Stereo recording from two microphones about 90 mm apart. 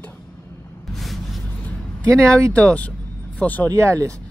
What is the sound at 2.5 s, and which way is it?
Speech, 15° left (ahead or behind).